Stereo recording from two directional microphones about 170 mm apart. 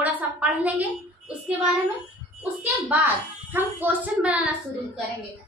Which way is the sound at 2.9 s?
10° right (ahead or behind).